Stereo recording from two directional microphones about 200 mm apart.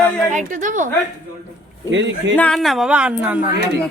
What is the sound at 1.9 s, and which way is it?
Speech, 65° right (ahead or behind).